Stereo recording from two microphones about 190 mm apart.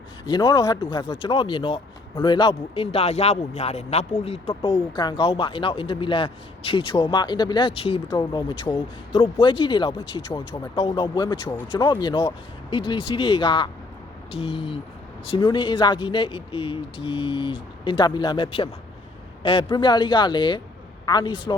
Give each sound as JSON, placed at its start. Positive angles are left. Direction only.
{"t": 0.3, "sound": "speech", "side_deg": 20}